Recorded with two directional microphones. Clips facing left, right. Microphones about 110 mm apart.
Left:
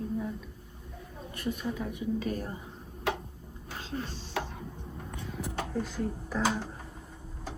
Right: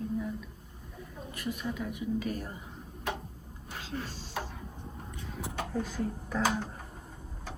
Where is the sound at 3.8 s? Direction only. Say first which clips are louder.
Left 2 dB; 30° left (ahead or behind).